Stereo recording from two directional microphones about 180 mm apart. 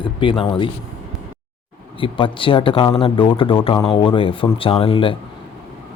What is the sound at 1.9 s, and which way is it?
Speech, 30° left (ahead or behind).